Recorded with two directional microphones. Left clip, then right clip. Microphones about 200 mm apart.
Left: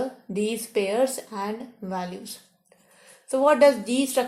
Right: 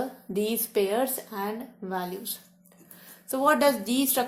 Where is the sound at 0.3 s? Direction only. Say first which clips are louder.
Even; 30° right (ahead or behind).